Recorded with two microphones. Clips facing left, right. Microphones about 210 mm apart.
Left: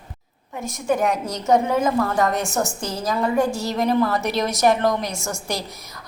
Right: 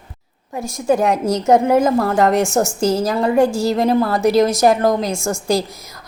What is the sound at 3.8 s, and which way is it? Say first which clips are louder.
Speech: even; 45° right (ahead or behind).